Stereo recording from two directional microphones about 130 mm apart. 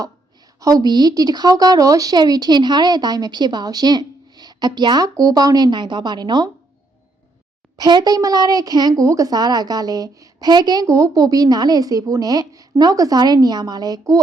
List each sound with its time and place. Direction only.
0.6 s a woman's voice: 30° right (ahead or behind)
7.8 s a woman's voice: 35° right (ahead or behind)